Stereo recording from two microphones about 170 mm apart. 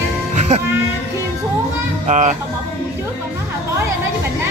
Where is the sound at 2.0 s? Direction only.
45° right (ahead or behind).